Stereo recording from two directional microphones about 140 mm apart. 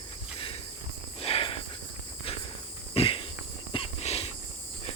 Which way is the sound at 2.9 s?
40° left (ahead or behind).